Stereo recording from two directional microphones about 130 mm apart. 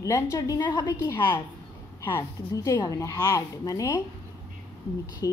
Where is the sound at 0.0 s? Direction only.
25° left (ahead or behind).